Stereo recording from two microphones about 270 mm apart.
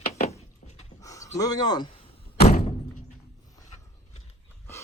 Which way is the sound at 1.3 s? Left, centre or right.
Centre.